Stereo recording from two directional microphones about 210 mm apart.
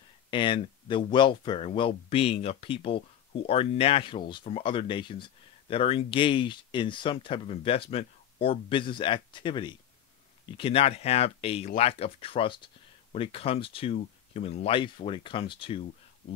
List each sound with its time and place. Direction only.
0.3 s speech: 25° left (ahead or behind)